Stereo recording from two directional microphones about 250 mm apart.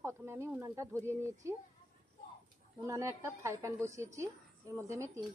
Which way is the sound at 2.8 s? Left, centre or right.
Centre.